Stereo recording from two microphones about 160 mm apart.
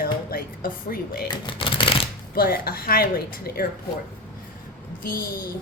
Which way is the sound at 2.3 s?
70° left (ahead or behind).